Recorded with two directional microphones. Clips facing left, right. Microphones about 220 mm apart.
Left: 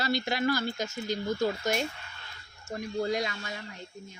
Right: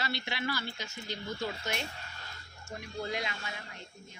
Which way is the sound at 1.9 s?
40° right (ahead or behind).